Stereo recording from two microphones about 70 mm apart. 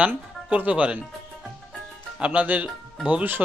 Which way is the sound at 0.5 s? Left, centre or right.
Centre.